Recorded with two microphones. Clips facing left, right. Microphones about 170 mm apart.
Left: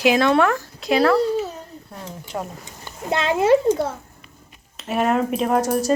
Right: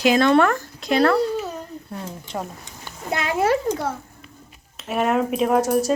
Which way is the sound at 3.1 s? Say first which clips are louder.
Left 4 dB; 25° left (ahead or behind).